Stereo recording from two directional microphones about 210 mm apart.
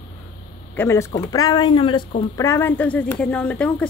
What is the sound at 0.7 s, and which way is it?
Speech, 10° left (ahead or behind).